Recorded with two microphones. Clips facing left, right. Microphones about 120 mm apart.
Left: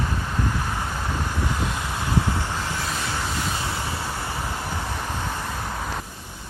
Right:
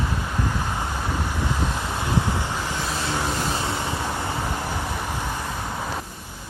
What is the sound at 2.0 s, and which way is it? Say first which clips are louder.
Vehicle: even; 15° right (ahead or behind).